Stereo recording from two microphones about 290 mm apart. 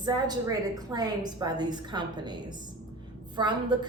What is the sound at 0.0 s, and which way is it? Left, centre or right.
A woman's voice, centre.